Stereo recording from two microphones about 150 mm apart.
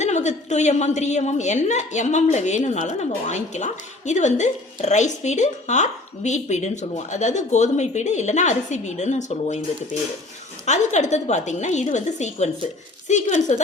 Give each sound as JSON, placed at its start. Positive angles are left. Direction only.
{"t": 0.0, "sound": "a woman's voice", "side_deg": 50}